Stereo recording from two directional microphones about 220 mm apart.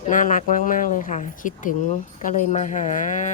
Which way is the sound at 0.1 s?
35° left (ahead or behind).